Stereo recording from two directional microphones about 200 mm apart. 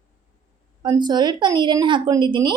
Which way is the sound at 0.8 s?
20° right (ahead or behind).